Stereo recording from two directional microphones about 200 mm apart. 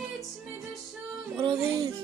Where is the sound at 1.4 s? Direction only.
30° right (ahead or behind).